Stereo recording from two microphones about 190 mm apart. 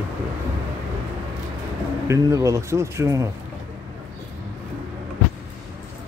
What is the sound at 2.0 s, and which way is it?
Speech, 15° right (ahead or behind).